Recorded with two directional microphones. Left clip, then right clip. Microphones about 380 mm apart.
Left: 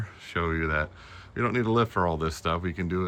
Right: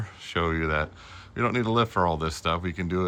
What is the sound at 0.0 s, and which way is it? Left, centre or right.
Speech, centre.